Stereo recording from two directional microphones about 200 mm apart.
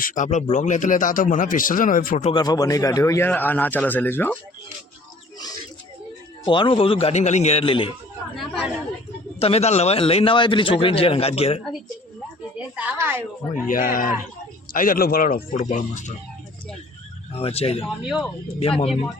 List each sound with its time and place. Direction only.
0.0 s a man's voice: 40° left (ahead or behind)
2.3 s a man's voice: 20° left (ahead or behind)
6.4 s a man's voice: 25° left (ahead or behind)
8.4 s speech: centre (ahead or behind)
9.4 s a man's voice: 30° left (ahead or behind)
12.5 s a woman's voice: 5° right (ahead or behind)
13.7 s speech: 45° left (ahead or behind)
17.3 s a man's voice: 30° left (ahead or behind)
18.0 s speech: 5° right (ahead or behind)
18.6 s a man's voice: 30° left (ahead or behind)